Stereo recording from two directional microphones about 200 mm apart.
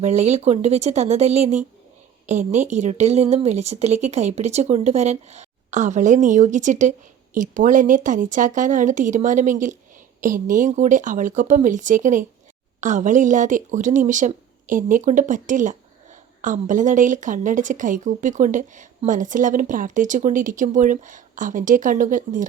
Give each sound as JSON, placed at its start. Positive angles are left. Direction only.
{"t": 0.0, "sound": "a woman's voice", "side_deg": -35}